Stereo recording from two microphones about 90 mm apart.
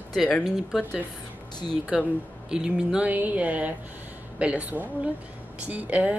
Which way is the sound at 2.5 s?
10° right (ahead or behind).